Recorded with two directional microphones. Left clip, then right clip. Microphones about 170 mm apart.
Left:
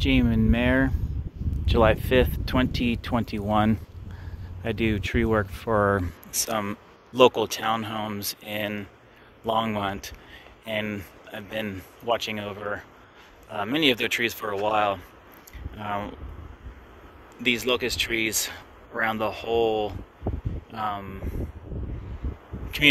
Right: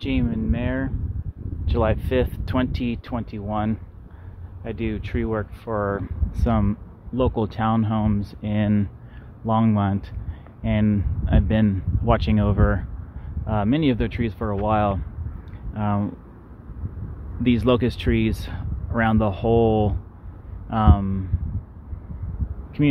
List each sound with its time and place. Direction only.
0.0 s speech: centre (ahead or behind)
0.5 s speech: 20° left (ahead or behind)
1.7 s speech: centre (ahead or behind)
13.6 s speech: centre (ahead or behind)
15.8 s speech: centre (ahead or behind)
17.4 s speech: 15° right (ahead or behind)
22.7 s speech: 5° left (ahead or behind)